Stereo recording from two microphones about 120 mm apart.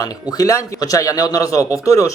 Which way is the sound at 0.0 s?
30° left (ahead or behind).